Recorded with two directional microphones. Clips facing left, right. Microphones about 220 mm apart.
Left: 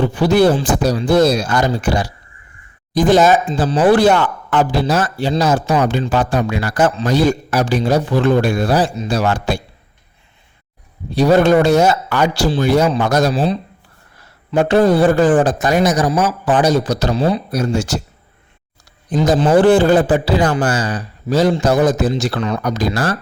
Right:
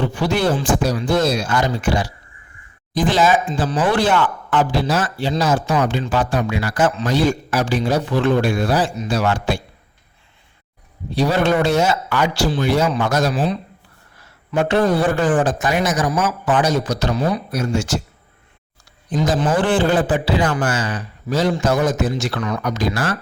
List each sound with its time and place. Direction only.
0.0 s speech: 35° left (ahead or behind)
11.1 s speech: 45° left (ahead or behind)
19.1 s speech: 35° left (ahead or behind)